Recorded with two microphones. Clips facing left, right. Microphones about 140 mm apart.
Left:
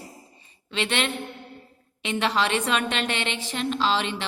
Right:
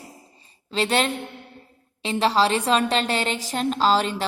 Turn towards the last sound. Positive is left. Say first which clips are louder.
# right 4 dB
turn(degrees=-40)  # may be behind; listen again after turning